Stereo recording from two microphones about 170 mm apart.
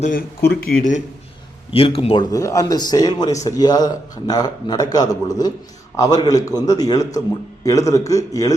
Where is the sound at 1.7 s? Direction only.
35° left (ahead or behind).